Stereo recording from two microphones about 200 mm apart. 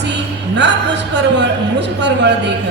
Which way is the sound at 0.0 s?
60° right (ahead or behind).